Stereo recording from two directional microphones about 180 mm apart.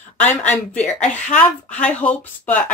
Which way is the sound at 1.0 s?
5° left (ahead or behind).